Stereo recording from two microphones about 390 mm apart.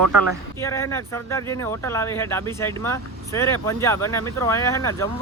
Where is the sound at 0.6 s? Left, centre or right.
Centre.